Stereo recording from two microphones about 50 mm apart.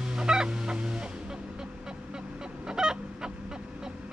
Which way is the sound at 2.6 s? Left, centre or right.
Centre.